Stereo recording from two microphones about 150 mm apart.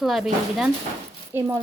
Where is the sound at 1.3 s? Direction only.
15° right (ahead or behind).